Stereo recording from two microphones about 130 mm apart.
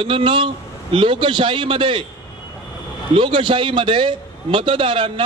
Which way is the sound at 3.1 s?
40° right (ahead or behind).